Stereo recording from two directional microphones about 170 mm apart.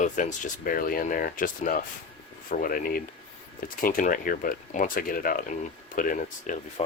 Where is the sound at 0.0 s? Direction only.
45° left (ahead or behind).